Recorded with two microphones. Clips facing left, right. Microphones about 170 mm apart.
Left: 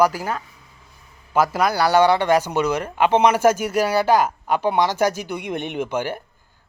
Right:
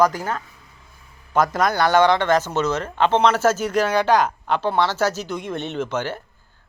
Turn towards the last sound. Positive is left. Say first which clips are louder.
# left 1 dB
turn(degrees=10)  # may be behind; listen again after turning